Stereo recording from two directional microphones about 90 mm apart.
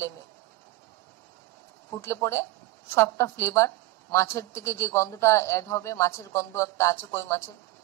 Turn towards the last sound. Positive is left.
turn(degrees=30)  # may be behind; listen again after turning